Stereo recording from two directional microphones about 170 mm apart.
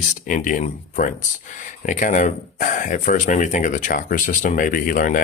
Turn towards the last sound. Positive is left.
turn(degrees=55)  # may be behind; listen again after turning